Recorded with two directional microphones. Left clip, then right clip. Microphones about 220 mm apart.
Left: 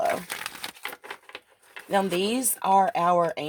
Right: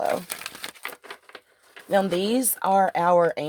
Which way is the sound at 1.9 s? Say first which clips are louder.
Right 2 dB; 35° right (ahead or behind).